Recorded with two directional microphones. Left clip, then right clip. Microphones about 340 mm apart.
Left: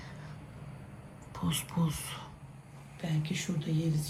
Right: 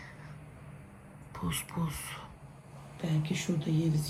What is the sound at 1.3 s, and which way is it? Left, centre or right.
Speech, centre.